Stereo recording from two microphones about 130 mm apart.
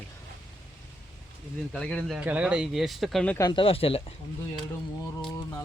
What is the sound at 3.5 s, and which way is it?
Speech, 45° left (ahead or behind).